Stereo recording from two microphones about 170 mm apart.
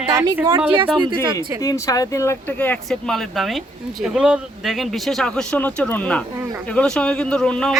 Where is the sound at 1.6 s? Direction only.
20° left (ahead or behind).